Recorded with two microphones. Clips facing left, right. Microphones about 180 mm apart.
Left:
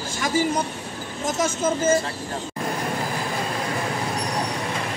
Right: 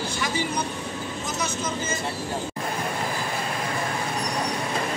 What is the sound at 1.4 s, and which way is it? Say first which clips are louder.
Speech: left 9 dB; 45° left (ahead or behind).